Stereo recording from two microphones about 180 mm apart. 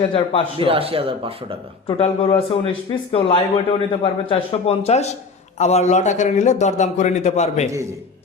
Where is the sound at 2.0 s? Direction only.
30° left (ahead or behind).